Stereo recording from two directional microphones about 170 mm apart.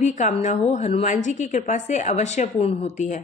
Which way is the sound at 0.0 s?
45° left (ahead or behind).